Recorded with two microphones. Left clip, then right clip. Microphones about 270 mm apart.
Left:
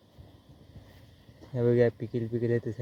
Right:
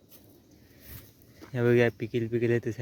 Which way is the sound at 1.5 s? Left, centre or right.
Right.